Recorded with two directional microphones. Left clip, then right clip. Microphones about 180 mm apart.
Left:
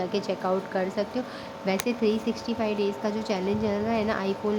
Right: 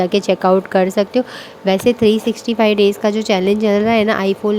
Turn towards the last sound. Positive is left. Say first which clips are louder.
# right 12 dB
turn(degrees=-45)  # may be behind; listen again after turning